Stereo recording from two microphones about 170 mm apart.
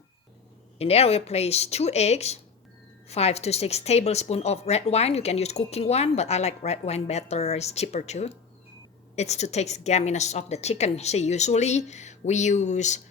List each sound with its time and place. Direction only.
0.8 s a woman's voice: 35° left (ahead or behind)